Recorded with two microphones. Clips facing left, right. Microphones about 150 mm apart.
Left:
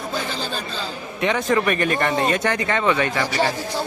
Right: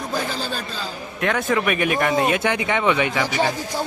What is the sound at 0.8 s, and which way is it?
A man's voice, centre (ahead or behind).